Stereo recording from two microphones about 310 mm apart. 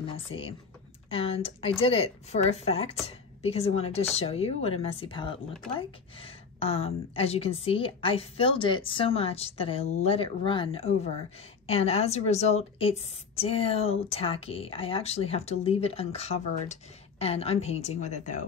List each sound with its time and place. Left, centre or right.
0.0 s a woman's voice: centre